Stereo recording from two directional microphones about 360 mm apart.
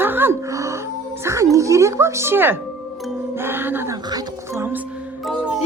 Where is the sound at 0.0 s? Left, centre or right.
Centre.